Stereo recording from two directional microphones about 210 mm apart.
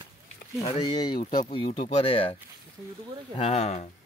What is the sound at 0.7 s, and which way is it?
Speech, 20° left (ahead or behind).